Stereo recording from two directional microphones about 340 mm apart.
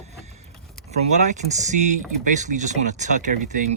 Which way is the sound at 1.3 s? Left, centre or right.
Right.